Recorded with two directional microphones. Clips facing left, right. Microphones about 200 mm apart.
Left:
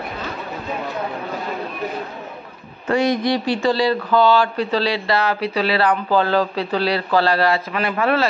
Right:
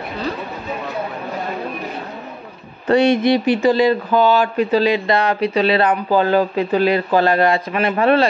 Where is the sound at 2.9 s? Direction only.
30° right (ahead or behind).